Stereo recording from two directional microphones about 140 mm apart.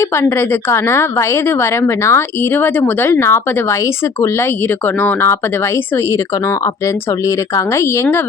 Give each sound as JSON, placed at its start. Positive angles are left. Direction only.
{"t": 0.0, "sound": "a woman's voice", "side_deg": 20}
{"t": 4.9, "sound": "a woman's voice", "side_deg": 15}
{"t": 6.8, "sound": "speech", "side_deg": 20}